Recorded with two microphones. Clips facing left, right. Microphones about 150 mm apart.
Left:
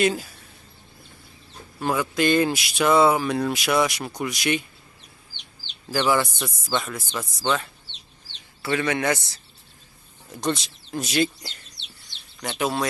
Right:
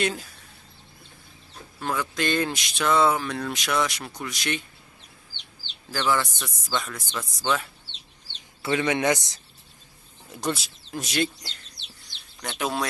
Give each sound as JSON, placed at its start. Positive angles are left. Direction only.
{"t": 0.0, "sound": "speech", "side_deg": 5}
{"t": 1.8, "sound": "speech", "side_deg": 10}
{"t": 5.9, "sound": "speech", "side_deg": 10}
{"t": 8.6, "sound": "speech", "side_deg": -20}
{"t": 10.3, "sound": "speech", "side_deg": -5}
{"t": 12.5, "sound": "speech", "side_deg": 0}